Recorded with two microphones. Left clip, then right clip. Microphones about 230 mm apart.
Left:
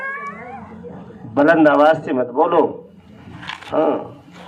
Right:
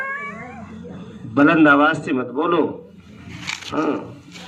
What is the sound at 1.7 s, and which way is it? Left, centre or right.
Speech, right.